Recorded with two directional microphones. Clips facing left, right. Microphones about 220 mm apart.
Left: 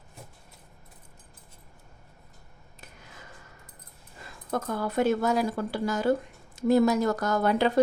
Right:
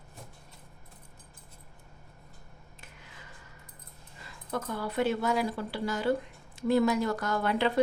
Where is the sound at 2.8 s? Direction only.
45° left (ahead or behind).